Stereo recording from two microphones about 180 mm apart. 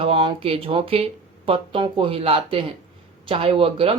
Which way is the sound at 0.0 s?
30° right (ahead or behind).